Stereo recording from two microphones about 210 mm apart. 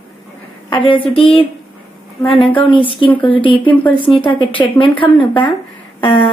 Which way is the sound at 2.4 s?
25° left (ahead or behind).